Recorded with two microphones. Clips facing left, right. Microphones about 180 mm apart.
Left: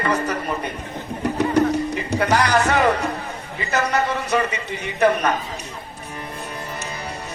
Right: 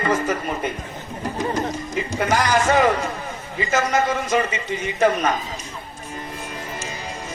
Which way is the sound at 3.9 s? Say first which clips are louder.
Even; 65° left (ahead or behind).